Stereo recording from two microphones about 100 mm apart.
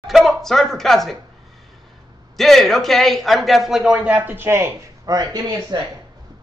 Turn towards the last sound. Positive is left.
turn(degrees=-40)  # may be behind; listen again after turning